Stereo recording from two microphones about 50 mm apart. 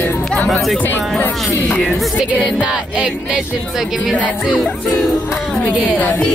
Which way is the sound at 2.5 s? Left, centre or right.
Right.